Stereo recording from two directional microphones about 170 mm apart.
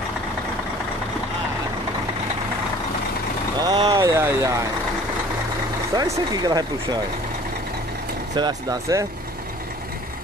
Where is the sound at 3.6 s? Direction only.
25° right (ahead or behind).